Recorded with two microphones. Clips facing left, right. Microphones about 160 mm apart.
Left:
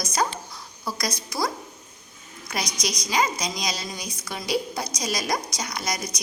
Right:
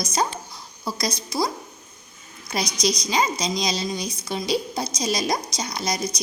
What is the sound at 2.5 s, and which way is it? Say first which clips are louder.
A woman's voice: right 5 dB; 25° right (ahead or behind).